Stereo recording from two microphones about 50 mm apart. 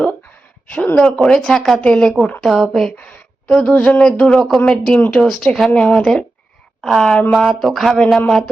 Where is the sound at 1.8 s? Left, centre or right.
Centre.